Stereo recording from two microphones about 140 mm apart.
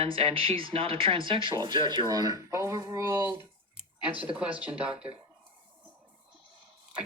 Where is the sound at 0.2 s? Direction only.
45° right (ahead or behind); by 5.1 s 5° right (ahead or behind).